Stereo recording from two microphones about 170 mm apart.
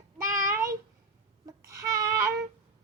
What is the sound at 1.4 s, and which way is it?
Babbling, 20° right (ahead or behind).